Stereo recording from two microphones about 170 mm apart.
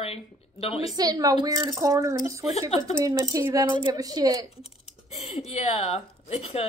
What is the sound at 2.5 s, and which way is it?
Speech, 40° left (ahead or behind).